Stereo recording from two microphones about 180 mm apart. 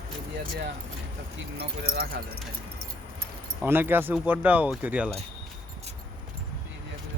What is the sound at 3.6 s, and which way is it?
Speech, 10° right (ahead or behind).